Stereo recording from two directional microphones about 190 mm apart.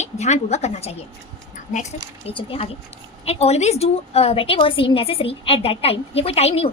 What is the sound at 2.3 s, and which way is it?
A woman's voice, 30° left (ahead or behind).